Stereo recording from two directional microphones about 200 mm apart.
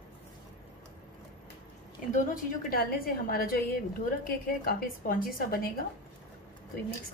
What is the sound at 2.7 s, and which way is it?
A woman's voice, 50° left (ahead or behind).